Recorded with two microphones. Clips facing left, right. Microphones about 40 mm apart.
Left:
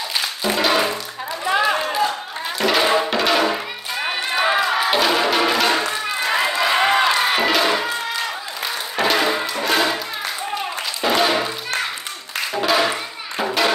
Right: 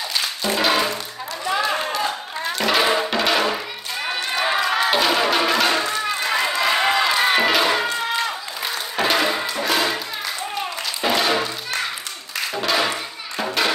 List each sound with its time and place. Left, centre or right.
0.4 s music: centre
1.6 s a sound: centre
2.6 s music: centre
6.2 s run: centre
7.3 s music: centre
11.0 s music: centre
12.5 s music: centre